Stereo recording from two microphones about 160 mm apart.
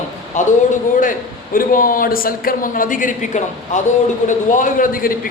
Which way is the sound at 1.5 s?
60° left (ahead or behind).